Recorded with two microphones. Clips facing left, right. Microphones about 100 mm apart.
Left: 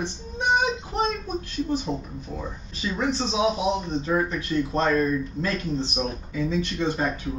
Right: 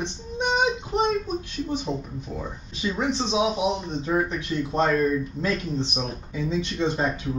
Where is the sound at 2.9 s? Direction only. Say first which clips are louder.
Even; 15° right (ahead or behind).